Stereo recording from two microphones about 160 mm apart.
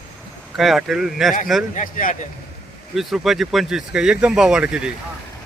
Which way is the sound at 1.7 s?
55° left (ahead or behind).